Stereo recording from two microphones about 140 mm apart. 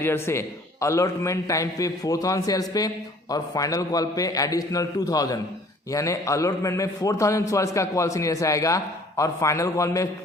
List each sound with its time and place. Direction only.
0.0 s a man's voice: 20° left (ahead or behind)